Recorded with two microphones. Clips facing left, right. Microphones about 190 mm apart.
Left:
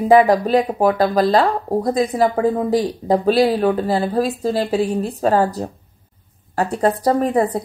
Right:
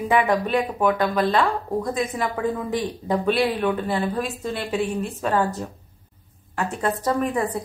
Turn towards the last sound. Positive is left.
turn(degrees=35)  # may be behind; listen again after turning